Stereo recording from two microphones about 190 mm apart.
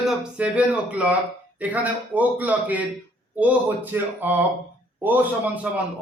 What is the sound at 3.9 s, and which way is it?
Speech, 10° right (ahead or behind).